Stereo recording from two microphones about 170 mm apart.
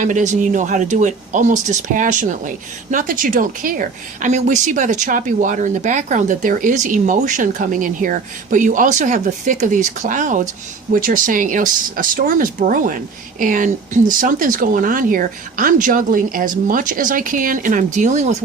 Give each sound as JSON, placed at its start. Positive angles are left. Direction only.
{"t": 0.0, "sound": "a woman's voice", "side_deg": -45}